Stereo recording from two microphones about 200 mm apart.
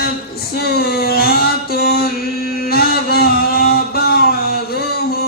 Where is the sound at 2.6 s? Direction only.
50° left (ahead or behind).